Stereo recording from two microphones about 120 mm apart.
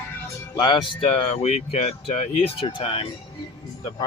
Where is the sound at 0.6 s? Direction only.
40° left (ahead or behind).